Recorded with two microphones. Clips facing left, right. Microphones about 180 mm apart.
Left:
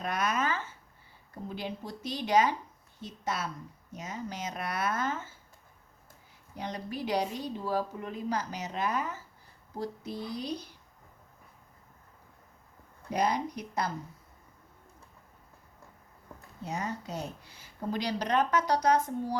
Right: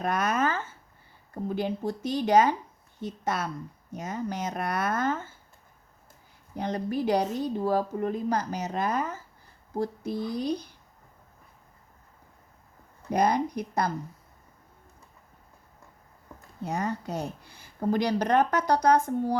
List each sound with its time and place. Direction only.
0.0 s a woman's voice: 50° right (ahead or behind)
6.6 s speech: 50° right (ahead or behind)
13.1 s speech: 50° right (ahead or behind)
16.6 s speech: 55° right (ahead or behind)